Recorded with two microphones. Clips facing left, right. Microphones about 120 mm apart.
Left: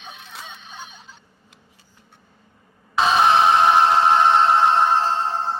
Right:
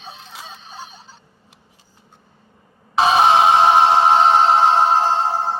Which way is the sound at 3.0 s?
20° right (ahead or behind).